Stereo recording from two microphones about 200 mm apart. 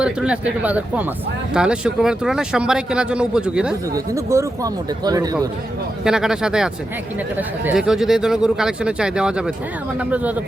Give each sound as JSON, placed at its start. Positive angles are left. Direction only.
{"t": 0.0, "sound": "speech", "side_deg": -5}
{"t": 3.9, "sound": "speech", "side_deg": -15}
{"t": 6.1, "sound": "speech", "side_deg": -5}